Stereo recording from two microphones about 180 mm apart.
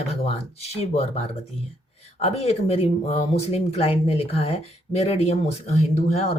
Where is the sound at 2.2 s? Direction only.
35° left (ahead or behind).